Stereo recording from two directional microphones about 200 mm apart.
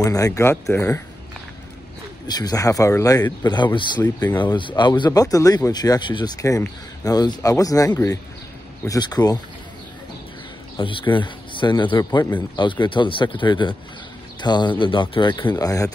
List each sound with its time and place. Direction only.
0.0 s speech: 15° left (ahead or behind)
2.2 s speech: 20° left (ahead or behind)
10.8 s speech: 25° left (ahead or behind)